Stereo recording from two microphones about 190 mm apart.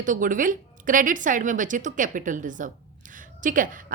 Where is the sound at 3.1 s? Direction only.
45° right (ahead or behind).